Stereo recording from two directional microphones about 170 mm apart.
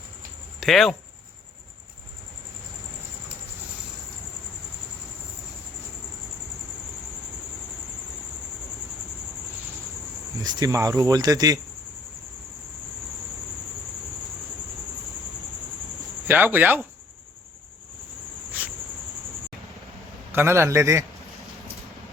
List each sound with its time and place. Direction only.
0.6 s speech: centre (ahead or behind)
10.4 s speech: 25° right (ahead or behind)
16.2 s a man's voice: 10° right (ahead or behind)
18.6 s cricket: 10° right (ahead or behind)
20.3 s a man's voice: 15° right (ahead or behind)